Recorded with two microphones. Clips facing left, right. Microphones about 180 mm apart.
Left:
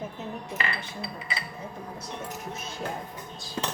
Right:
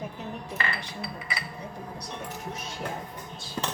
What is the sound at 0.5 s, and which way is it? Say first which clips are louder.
Speech: even; 20° left (ahead or behind).